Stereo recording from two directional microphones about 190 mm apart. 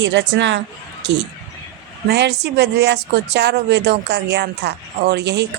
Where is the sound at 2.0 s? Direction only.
60° right (ahead or behind).